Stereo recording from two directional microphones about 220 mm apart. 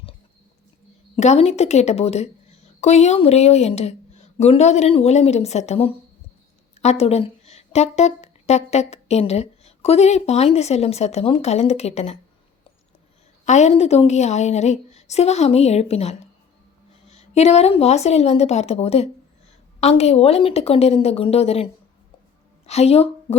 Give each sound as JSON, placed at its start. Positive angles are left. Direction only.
{"t": 1.1, "sound": "a woman's voice", "side_deg": 30}
{"t": 13.4, "sound": "a woman's voice", "side_deg": 30}